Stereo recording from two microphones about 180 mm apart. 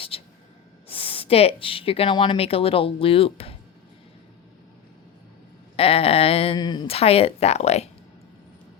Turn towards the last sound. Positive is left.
turn(degrees=35)  # may be behind; listen again after turning